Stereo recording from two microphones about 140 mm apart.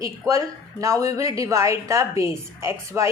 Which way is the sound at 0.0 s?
25° right (ahead or behind).